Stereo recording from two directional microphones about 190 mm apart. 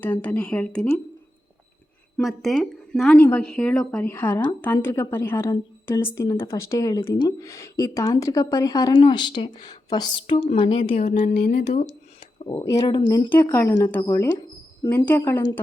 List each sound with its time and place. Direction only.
0.0 s a woman's voice: 10° left (ahead or behind)
2.1 s a woman's voice: centre (ahead or behind); by 11.7 s 55° left (ahead or behind)
12.2 s a sound: 20° left (ahead or behind)
12.8 s speech: 30° left (ahead or behind)
13.3 s a woman's voice: 15° left (ahead or behind)